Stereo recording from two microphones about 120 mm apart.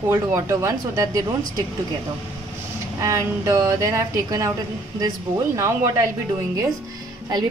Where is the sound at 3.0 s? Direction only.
25° right (ahead or behind).